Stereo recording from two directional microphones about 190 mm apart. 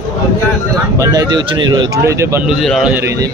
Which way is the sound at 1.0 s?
20° right (ahead or behind).